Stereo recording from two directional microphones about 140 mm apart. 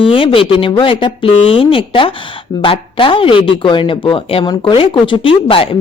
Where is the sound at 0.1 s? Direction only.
40° left (ahead or behind).